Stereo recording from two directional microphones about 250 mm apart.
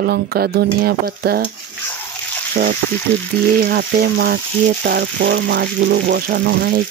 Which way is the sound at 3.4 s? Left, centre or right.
Right.